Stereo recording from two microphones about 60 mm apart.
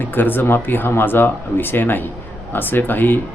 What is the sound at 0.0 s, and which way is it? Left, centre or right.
Speech, left.